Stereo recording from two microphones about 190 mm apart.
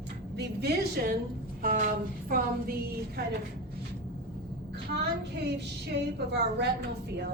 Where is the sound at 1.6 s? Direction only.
45° right (ahead or behind).